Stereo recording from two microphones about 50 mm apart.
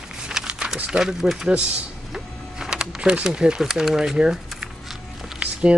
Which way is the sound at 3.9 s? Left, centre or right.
Centre.